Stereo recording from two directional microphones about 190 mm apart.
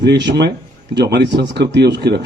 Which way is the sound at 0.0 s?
65° right (ahead or behind).